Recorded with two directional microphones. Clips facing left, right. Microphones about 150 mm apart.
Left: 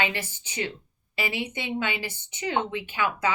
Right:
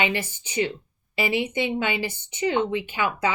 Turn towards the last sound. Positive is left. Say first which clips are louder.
# right 2 dB
turn(degrees=-20)  # may be behind; listen again after turning